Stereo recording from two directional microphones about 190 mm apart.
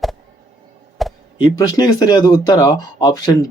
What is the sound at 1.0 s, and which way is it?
Chop, centre (ahead or behind).